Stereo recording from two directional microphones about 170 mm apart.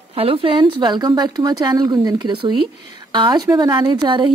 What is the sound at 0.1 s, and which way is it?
Speech, 30° right (ahead or behind).